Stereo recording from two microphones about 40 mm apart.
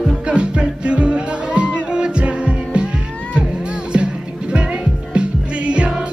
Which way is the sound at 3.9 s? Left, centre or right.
Right.